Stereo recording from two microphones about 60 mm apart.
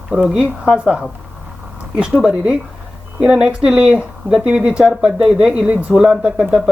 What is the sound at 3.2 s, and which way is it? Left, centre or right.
Speech, centre.